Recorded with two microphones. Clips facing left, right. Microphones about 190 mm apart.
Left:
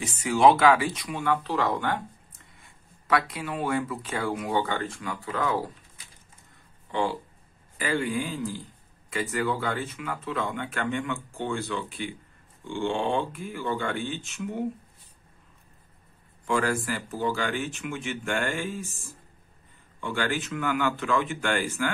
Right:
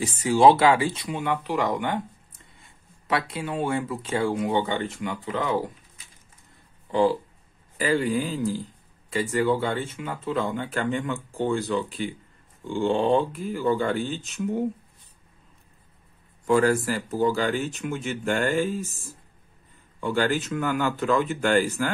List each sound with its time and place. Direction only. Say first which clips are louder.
0.0 s speech: right 3 dB; 30° right (ahead or behind)
6.9 s speech: right 7 dB; 35° right (ahead or behind)
16.4 s speech: right 6 dB; 40° right (ahead or behind)
20.0 s speech: right 5 dB; 40° right (ahead or behind)